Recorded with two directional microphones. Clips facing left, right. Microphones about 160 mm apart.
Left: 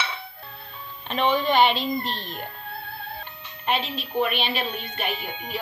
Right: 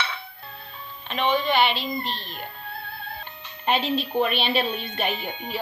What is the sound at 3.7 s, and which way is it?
Speech, 35° right (ahead or behind).